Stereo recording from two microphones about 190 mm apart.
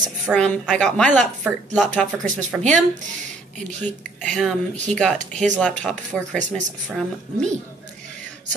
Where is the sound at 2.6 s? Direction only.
Centre (ahead or behind).